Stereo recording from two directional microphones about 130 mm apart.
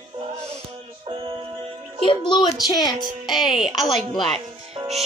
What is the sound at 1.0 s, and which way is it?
Music, 40° right (ahead or behind).